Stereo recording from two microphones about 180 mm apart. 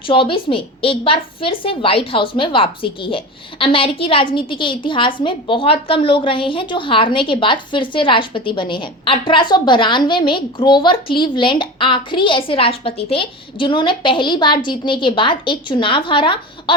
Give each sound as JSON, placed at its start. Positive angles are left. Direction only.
{"t": 0.1, "sound": "speech", "side_deg": 30}